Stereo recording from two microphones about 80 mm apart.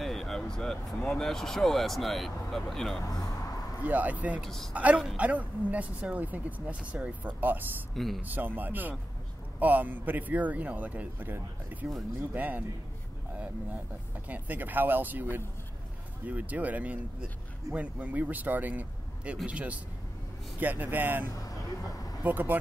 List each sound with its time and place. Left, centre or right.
0.0 s speech: centre
3.0 s speech: left
3.8 s a woman's voice: right
4.4 s a man's voice: centre
4.7 s a woman's voice: centre
7.9 s a man's voice: centre
8.2 s a woman's voice: right
14.2 s a woman's voice: right
21.5 s vehicle: left
22.2 s a woman's voice: right